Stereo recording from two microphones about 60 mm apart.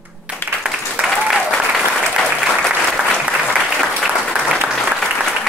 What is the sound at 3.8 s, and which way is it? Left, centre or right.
Applause, centre.